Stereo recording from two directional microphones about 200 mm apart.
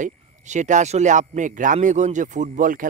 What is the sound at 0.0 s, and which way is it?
Speech, 35° right (ahead or behind).